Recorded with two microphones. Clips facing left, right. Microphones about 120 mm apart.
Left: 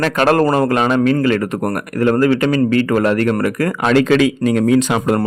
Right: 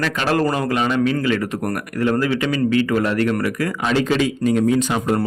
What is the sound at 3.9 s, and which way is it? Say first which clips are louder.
Speech: left 6 dB; 90° left.